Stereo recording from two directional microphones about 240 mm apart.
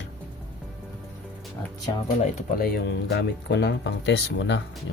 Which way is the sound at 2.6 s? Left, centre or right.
Left.